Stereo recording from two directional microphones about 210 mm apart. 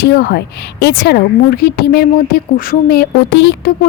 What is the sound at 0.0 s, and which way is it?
Speech, 50° left (ahead or behind).